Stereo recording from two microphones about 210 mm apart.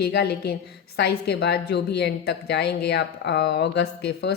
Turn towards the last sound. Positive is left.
turn(degrees=50)  # may be behind; listen again after turning